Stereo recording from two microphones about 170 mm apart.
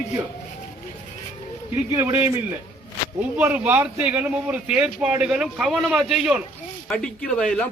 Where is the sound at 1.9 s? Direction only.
15° right (ahead or behind).